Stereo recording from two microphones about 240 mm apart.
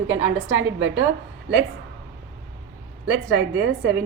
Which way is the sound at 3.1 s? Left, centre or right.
Right.